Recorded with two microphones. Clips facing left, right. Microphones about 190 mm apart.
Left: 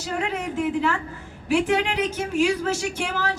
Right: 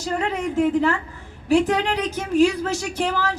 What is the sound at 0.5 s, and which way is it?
Speech, 40° right (ahead or behind).